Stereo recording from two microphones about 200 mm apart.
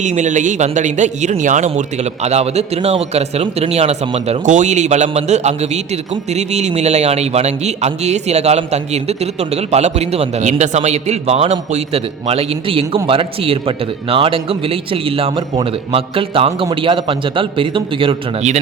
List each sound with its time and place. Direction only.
0.0 s speech: 35° right (ahead or behind)